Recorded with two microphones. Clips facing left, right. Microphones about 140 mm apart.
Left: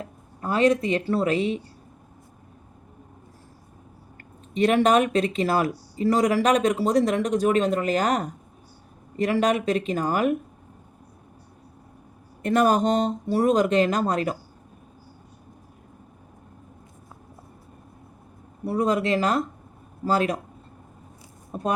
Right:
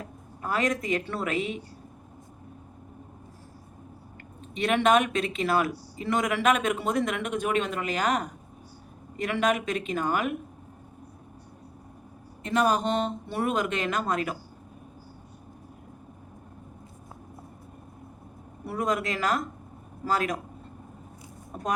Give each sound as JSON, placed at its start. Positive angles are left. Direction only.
{"t": 0.0, "sound": "speech", "side_deg": 30}
{"t": 4.5, "sound": "speech", "side_deg": 40}
{"t": 12.4, "sound": "speech", "side_deg": 50}
{"t": 18.6, "sound": "speech", "side_deg": 30}